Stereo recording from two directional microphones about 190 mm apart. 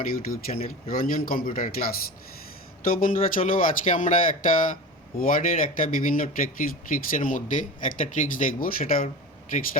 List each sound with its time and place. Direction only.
0.0 s speech: 50° left (ahead or behind)